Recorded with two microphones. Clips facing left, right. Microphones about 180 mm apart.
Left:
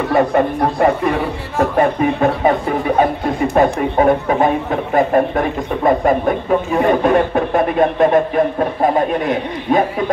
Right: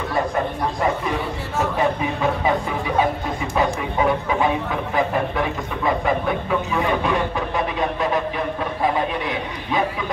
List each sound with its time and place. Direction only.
0.1 s speech: 65° left (ahead or behind); by 10.0 s 50° left (ahead or behind)